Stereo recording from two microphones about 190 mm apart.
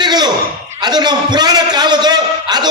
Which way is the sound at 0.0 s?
20° right (ahead or behind).